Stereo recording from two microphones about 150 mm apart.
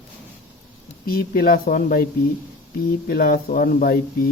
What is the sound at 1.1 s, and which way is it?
Speech, 85° left.